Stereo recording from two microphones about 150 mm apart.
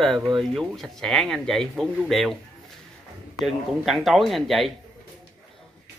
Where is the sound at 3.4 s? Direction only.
Centre (ahead or behind).